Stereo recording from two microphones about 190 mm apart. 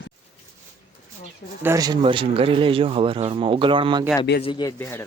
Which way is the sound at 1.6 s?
15° right (ahead or behind).